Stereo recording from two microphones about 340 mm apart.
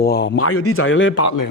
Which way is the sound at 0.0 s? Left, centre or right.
Left.